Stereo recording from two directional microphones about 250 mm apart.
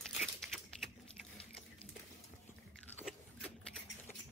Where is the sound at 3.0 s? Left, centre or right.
Centre.